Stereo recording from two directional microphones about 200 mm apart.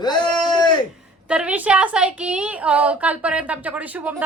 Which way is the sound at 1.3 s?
5° right (ahead or behind).